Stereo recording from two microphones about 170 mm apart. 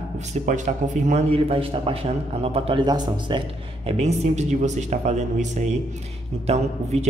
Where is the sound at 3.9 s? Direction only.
40° right (ahead or behind).